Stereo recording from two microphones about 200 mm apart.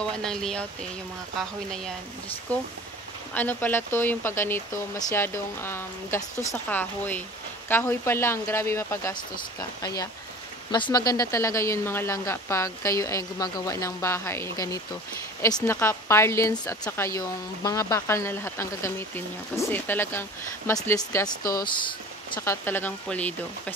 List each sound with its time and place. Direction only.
0.0 s speech: 5° left (ahead or behind)
3.3 s speech: 10° left (ahead or behind)
21.4 s speech: 45° left (ahead or behind)
21.7 s speech: 25° left (ahead or behind); by 23.7 s 5° left (ahead or behind)